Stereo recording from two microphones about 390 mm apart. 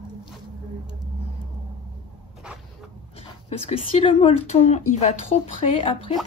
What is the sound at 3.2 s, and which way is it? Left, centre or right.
Speech, centre.